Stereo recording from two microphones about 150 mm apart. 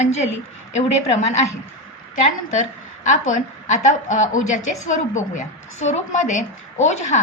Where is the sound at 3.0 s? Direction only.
55° left (ahead or behind).